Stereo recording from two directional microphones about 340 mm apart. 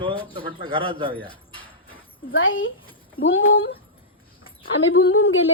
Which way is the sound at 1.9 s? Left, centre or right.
Left.